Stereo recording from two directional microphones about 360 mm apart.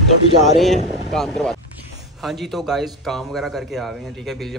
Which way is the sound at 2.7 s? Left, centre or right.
Centre.